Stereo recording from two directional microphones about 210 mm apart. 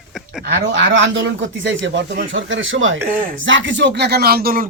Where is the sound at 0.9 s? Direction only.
60° right (ahead or behind); by 4.6 s 45° right (ahead or behind).